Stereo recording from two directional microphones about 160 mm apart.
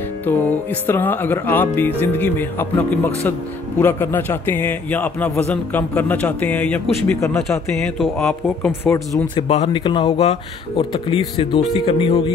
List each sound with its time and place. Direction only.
0.2 s speech: 10° left (ahead or behind)
9.3 s speech: 35° left (ahead or behind)